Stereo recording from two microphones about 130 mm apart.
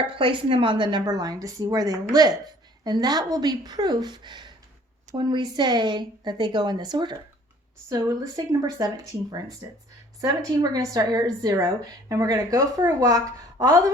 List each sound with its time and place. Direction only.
0.2 s a woman's voice: 40° right (ahead or behind)